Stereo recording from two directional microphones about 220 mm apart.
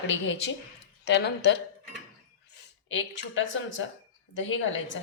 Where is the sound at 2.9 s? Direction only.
55° left (ahead or behind).